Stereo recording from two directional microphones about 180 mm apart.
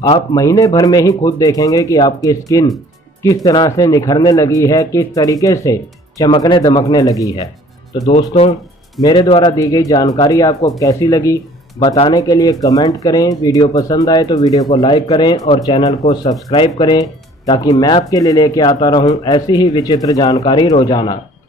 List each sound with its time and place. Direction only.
0.0 s speech: 25° left (ahead or behind)
8.3 s speech: 35° left (ahead or behind)
9.0 s speech: 20° left (ahead or behind)